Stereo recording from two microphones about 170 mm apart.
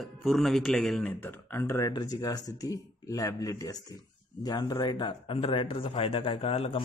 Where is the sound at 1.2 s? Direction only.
15° left (ahead or behind).